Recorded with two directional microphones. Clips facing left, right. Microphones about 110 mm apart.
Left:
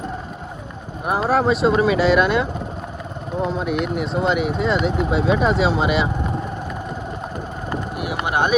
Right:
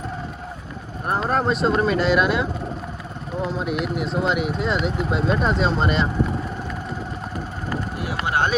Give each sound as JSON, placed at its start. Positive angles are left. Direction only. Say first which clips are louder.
{"t": 1.0, "sound": "speech", "louder": "left 3 dB", "side_deg": 5}
{"t": 7.9, "sound": "boat", "louder": "left 2 dB", "side_deg": 20}